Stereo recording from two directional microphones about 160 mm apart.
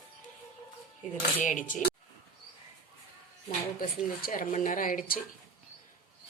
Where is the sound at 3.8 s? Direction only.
60° left (ahead or behind).